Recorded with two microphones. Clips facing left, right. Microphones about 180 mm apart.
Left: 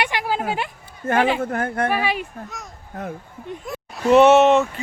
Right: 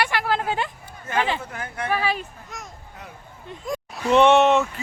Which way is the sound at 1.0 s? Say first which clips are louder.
Left 6 dB; 50° left (ahead or behind).